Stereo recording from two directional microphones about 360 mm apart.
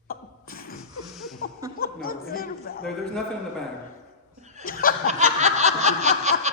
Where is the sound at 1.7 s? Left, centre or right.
Left.